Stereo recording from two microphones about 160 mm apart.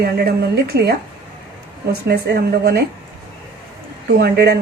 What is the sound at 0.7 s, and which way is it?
Speech, 90° right.